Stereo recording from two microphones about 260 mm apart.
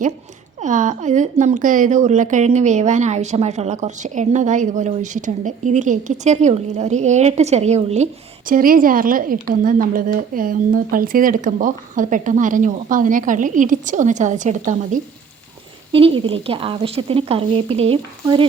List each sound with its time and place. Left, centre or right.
0.6 s a woman's voice: right
15.9 s speech: right